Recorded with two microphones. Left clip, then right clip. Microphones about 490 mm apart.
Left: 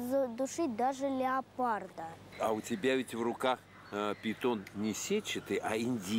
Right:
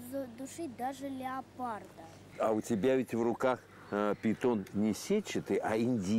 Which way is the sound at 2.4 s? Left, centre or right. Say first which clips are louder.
Right 2 dB; right.